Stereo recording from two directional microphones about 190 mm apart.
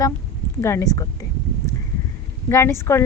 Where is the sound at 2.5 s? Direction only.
15° left (ahead or behind).